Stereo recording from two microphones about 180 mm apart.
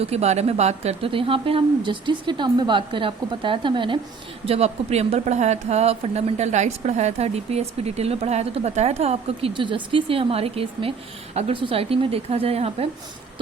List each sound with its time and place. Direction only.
0.0 s a woman's voice: 35° right (ahead or behind)